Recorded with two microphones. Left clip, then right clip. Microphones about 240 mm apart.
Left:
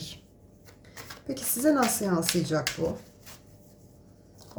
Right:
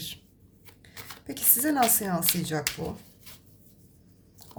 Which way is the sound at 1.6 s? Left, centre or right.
Right.